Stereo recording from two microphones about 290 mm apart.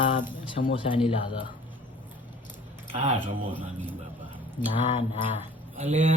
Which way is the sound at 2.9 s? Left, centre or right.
Right.